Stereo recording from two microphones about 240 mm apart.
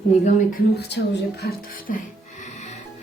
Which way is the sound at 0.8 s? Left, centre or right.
Left.